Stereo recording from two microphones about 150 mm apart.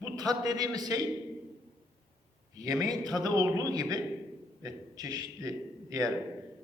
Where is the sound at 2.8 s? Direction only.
25° right (ahead or behind).